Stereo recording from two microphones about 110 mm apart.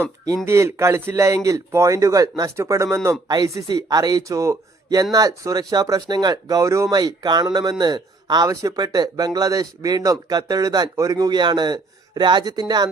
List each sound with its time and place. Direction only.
0.4 s speech: 25° right (ahead or behind)